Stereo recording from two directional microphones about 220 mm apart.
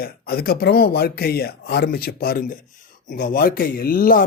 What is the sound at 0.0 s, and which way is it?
Speech, 45° left (ahead or behind).